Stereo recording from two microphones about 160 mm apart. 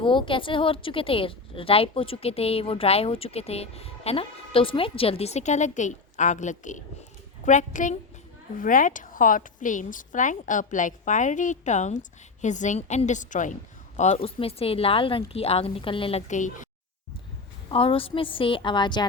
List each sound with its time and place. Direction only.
0.0 s a woman's voice: 30° left (ahead or behind)
16.3 s a woman's voice: 50° left (ahead or behind)
17.7 s a woman's voice: 35° left (ahead or behind)